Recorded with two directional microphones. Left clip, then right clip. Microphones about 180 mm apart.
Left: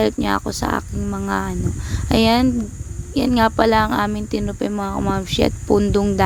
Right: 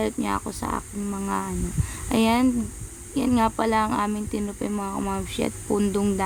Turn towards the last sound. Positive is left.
turn(degrees=35)  # may be behind; listen again after turning